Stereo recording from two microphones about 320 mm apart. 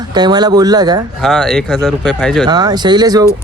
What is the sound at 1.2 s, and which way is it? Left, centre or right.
Speech, centre.